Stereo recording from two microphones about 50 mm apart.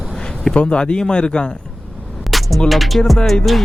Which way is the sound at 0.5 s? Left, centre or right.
Left.